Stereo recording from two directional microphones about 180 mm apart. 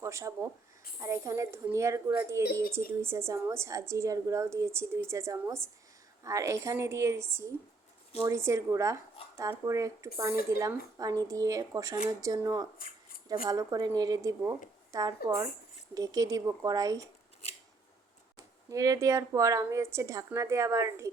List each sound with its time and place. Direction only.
0.0 s speech: 15° right (ahead or behind)
18.3 s speech: 20° right (ahead or behind)